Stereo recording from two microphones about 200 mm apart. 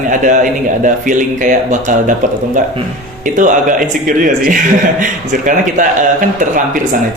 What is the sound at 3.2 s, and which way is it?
Speech, 40° right (ahead or behind).